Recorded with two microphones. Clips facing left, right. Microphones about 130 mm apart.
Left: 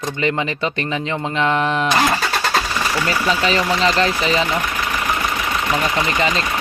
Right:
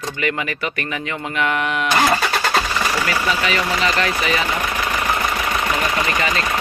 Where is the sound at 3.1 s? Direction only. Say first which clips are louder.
Left 2 dB; 30° left (ahead or behind).